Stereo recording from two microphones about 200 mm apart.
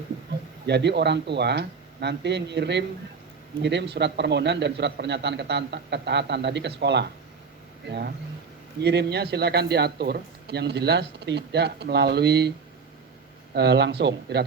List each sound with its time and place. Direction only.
0.7 s speech: 60° right (ahead or behind)